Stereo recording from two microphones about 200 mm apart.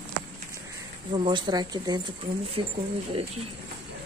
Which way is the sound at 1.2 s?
25° right (ahead or behind).